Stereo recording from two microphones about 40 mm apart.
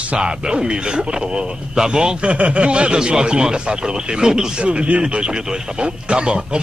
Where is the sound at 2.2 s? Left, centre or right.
Right.